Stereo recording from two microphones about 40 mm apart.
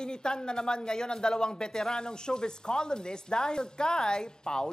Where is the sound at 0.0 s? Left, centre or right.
Centre.